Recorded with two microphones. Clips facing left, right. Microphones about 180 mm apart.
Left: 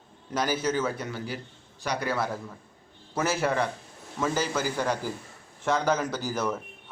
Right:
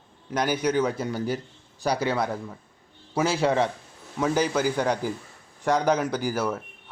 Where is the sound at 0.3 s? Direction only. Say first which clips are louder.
Right 3 dB; 15° right (ahead or behind).